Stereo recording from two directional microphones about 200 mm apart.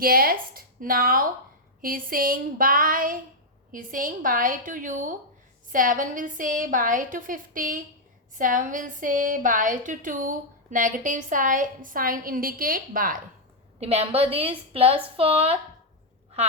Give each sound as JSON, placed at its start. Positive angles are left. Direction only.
{"t": 0.0, "sound": "a woman's voice", "side_deg": -45}
{"t": 13.7, "sound": "a woman's voice", "side_deg": -30}